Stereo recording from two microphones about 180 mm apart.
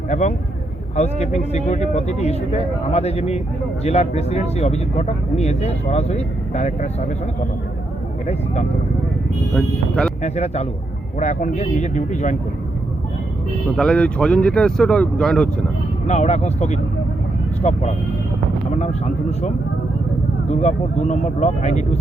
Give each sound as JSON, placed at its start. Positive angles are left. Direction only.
{"t": 0.1, "sound": "speech", "side_deg": 40}
{"t": 9.6, "sound": "speech", "side_deg": 5}
{"t": 10.2, "sound": "speech", "side_deg": 35}
{"t": 13.7, "sound": "speech", "side_deg": 5}
{"t": 16.0, "sound": "speech", "side_deg": 40}
{"t": 20.5, "sound": "speech", "side_deg": 40}